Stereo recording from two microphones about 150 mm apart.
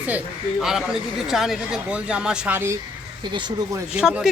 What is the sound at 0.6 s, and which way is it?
Speech, 5° right (ahead or behind).